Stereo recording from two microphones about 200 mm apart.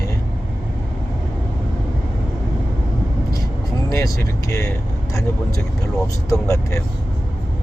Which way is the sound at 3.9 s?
15° left (ahead or behind).